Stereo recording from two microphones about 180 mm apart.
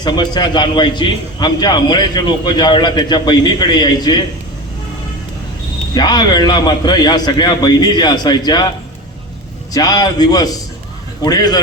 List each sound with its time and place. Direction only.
0.0 s a man's voice: 25° left (ahead or behind)
5.9 s a man's voice: 25° left (ahead or behind)
9.7 s a man's voice: 20° left (ahead or behind)